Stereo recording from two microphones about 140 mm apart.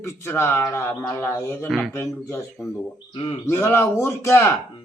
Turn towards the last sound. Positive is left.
turn(degrees=20)  # may be behind; listen again after turning